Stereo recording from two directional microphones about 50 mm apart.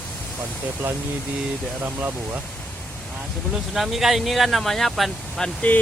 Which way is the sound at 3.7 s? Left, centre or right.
Centre.